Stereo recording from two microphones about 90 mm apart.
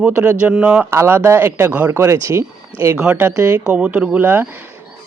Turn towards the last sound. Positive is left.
turn(degrees=-25)  # may be behind; listen again after turning